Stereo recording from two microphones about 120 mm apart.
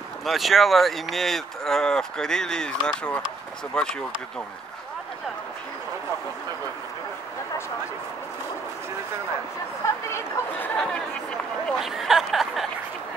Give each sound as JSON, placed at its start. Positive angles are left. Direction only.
{"t": 0.2, "sound": "speech", "side_deg": 0}
{"t": 10.0, "sound": "speech", "side_deg": 20}
{"t": 10.8, "sound": "speech", "side_deg": 5}
{"t": 11.8, "sound": "speech", "side_deg": -5}